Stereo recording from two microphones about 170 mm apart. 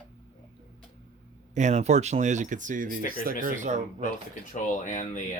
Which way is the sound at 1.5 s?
40° right (ahead or behind).